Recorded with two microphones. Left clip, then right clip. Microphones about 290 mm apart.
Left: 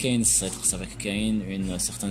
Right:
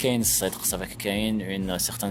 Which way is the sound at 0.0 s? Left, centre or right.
Right.